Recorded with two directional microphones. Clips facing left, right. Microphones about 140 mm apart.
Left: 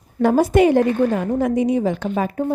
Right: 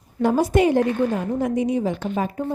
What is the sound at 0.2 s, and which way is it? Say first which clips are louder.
A woman's voice: left 4 dB; 65° left (ahead or behind).